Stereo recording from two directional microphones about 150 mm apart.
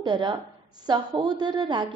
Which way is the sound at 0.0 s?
30° right (ahead or behind).